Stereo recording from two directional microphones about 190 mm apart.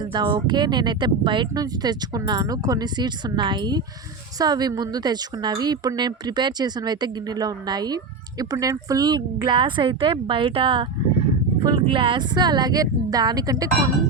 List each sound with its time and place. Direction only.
0.1 s speech: 25° right (ahead or behind)